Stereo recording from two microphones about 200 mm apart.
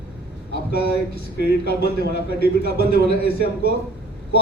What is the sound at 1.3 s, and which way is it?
A man's voice, 55° left (ahead or behind).